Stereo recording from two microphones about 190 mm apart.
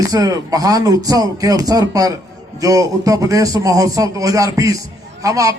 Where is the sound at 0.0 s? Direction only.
20° right (ahead or behind).